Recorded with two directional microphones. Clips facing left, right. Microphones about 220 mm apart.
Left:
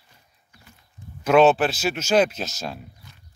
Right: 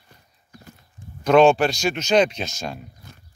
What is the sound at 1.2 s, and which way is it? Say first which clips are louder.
Speech: right 1 dB; 5° left (ahead or behind).